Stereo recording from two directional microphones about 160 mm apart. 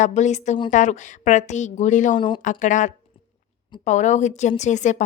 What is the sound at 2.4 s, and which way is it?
A woman's voice, 50° left (ahead or behind).